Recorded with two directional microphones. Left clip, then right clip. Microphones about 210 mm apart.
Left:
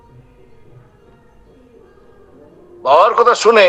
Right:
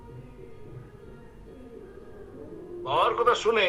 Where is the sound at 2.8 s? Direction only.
55° left (ahead or behind).